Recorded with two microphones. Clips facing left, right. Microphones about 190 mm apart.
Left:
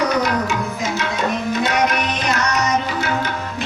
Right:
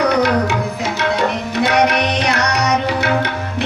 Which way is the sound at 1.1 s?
70° right (ahead or behind).